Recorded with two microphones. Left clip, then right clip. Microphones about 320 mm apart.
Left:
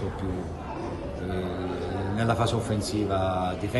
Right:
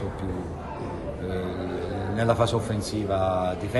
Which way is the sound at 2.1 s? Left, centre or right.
Centre.